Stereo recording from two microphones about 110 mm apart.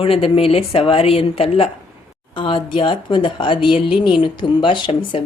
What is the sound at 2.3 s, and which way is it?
Speech, 45° left (ahead or behind).